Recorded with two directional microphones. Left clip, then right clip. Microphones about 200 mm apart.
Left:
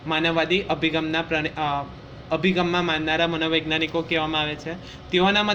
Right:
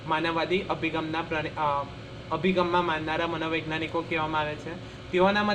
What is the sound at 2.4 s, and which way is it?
A man's voice, 45° left (ahead or behind).